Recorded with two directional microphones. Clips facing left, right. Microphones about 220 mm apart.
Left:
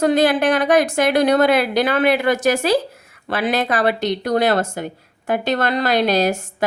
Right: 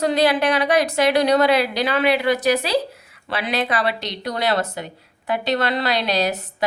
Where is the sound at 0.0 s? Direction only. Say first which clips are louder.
Left 3 dB; 50° left (ahead or behind).